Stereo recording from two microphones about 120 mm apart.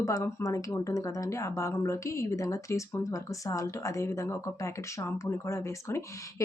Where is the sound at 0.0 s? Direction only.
25° left (ahead or behind).